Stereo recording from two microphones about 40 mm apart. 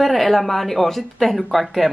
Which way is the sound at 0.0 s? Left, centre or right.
Centre.